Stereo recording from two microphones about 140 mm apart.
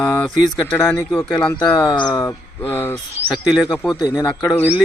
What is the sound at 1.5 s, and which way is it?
A man's voice, 30° left (ahead or behind).